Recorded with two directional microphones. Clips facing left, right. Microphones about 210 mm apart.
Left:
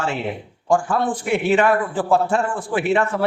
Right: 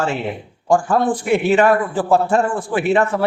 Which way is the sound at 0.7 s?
40° right (ahead or behind).